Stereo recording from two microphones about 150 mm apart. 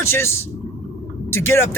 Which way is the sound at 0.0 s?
15° left (ahead or behind).